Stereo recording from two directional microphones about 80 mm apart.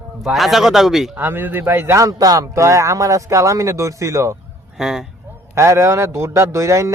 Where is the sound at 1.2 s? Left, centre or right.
Right.